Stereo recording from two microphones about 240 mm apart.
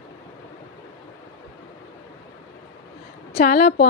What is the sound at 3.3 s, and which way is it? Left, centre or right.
Speech, left.